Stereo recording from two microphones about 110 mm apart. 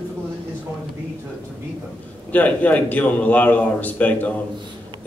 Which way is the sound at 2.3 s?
15° left (ahead or behind).